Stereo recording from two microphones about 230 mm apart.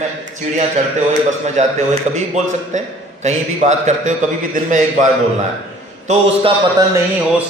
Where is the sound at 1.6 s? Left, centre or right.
Right.